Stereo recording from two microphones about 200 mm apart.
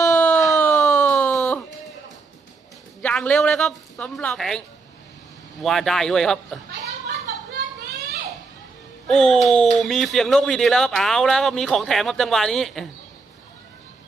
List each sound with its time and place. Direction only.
0.0 s a sound: 15° left (ahead or behind)
3.0 s speech: 5° left (ahead or behind)
9.0 s speech: centre (ahead or behind)